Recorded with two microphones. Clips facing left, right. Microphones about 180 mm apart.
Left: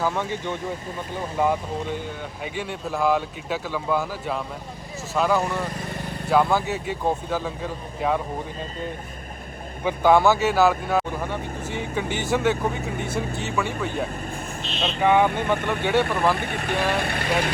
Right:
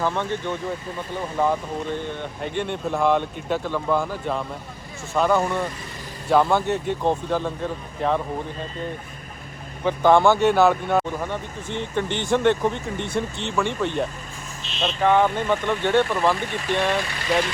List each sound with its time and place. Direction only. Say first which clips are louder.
0.0 s speech: right 1 dB; 10° left (ahead or behind)
9.8 s speech: right 1 dB; 10° left (ahead or behind)
15.3 s speech: right 1 dB; 60° left (ahead or behind)
15.8 s speech: right 2 dB; 10° left (ahead or behind)
16.3 s speech: right 1 dB; 60° left (ahead or behind)